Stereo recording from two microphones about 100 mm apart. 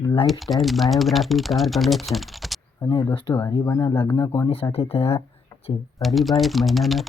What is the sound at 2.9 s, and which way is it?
Speech, 55° left (ahead or behind).